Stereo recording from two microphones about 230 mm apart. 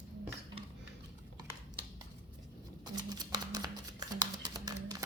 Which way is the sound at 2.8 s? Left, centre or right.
Centre.